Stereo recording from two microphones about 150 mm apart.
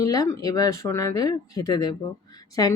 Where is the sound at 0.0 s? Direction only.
20° left (ahead or behind).